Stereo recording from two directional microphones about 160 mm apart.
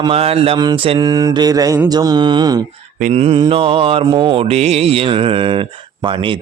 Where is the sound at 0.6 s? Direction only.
25° right (ahead or behind).